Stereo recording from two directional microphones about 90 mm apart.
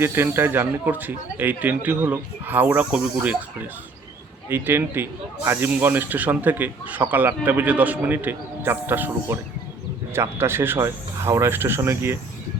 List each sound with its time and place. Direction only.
0.0 s speech: 30° right (ahead or behind)
4.4 s speech: 25° right (ahead or behind)